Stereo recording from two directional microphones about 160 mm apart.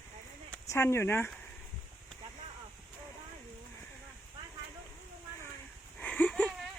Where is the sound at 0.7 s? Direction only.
15° left (ahead or behind).